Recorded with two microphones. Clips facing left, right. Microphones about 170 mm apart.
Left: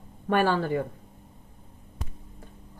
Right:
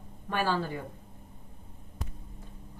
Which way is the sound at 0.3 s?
60° left (ahead or behind).